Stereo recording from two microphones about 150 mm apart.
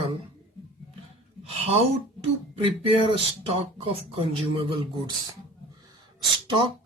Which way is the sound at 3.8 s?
40° right (ahead or behind).